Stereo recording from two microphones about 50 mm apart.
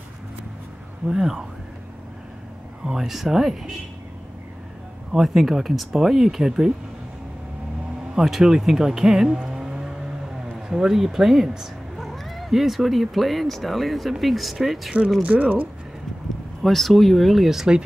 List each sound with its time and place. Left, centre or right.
1.0 s speech: centre
2.8 s speech: centre
5.1 s speech: centre
8.1 s speech: centre
15.3 s speech: right
16.6 s speech: centre